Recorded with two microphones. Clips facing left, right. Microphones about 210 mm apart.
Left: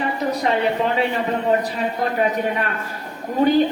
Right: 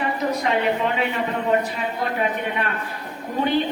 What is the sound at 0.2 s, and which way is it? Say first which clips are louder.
A man's voice: left 3 dB; 30° left (ahead or behind).